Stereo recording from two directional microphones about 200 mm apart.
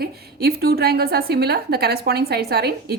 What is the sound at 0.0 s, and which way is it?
A woman's voice, 50° right (ahead or behind).